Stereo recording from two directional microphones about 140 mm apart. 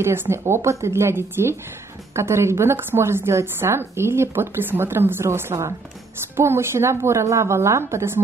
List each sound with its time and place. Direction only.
0.0 s a woman's voice: 15° right (ahead or behind)